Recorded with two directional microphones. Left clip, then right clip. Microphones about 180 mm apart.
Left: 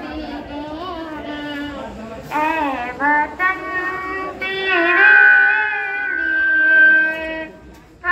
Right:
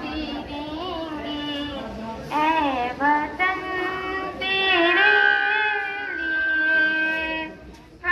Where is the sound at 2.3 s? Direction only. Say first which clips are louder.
Left 2 dB; 10° right (ahead or behind).